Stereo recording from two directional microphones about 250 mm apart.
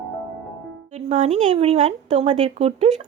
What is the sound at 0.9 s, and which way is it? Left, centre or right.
Speech, right.